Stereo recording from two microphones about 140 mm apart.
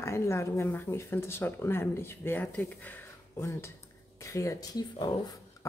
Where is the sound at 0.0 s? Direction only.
20° left (ahead or behind).